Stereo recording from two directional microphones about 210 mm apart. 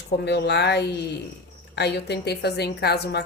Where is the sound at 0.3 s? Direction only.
55° left (ahead or behind).